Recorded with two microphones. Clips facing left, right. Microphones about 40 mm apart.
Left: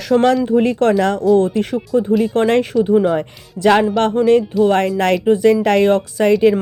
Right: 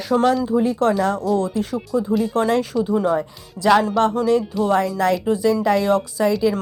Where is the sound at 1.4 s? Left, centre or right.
Left.